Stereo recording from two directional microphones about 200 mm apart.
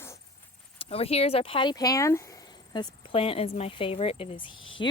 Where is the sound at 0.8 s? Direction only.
30° left (ahead or behind).